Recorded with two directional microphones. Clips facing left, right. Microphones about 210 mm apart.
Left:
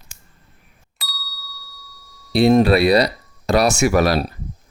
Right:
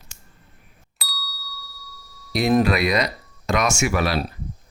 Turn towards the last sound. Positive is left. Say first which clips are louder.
# left 6 dB
turn(degrees=40)  # may be behind; listen again after turning